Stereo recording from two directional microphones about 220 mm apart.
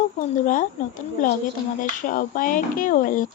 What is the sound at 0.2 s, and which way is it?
Speech, 35° left (ahead or behind).